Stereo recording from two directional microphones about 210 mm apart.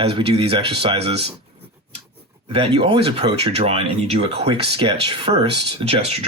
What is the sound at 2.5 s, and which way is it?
Speech, 25° right (ahead or behind).